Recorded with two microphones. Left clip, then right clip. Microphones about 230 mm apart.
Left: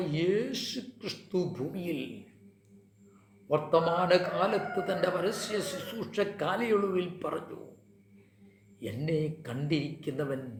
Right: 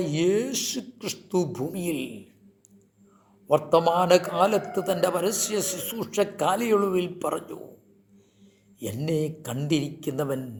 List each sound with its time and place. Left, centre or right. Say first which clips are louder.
0.0 s a man's voice: right 5 dB; right
3.5 s a man's voice: right 6 dB; right
8.8 s a man's voice: right 5 dB; right